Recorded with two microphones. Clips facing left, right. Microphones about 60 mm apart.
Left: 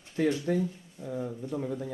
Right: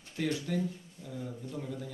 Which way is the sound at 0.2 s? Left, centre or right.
Left.